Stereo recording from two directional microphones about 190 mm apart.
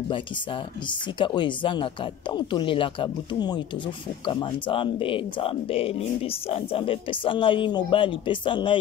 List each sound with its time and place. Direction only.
0.1 s speech: 25° left (ahead or behind)